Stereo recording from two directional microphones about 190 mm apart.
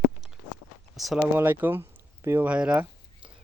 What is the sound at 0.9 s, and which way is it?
Speech, centre (ahead or behind).